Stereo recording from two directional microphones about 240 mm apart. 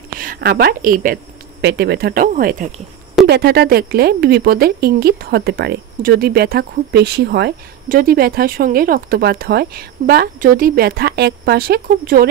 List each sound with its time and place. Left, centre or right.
0.2 s speech: right